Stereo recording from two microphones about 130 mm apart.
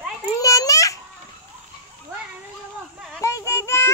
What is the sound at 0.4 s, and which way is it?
Babbling, 25° left (ahead or behind).